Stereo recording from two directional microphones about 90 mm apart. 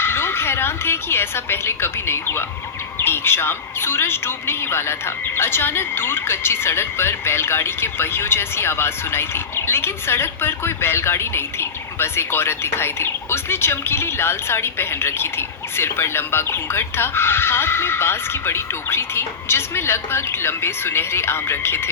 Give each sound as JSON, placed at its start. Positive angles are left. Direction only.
{"t": 0.0, "sound": "a woman's voice", "side_deg": 25}